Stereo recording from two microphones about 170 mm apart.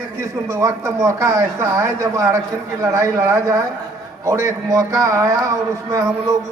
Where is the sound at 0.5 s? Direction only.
15° right (ahead or behind).